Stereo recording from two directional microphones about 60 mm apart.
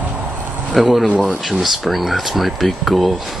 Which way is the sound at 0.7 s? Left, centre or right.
Centre.